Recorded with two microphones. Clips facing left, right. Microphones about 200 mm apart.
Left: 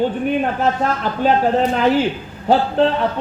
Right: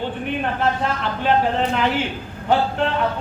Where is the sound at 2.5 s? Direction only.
35° left (ahead or behind).